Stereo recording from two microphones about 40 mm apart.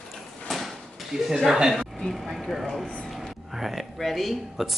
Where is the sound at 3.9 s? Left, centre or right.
Centre.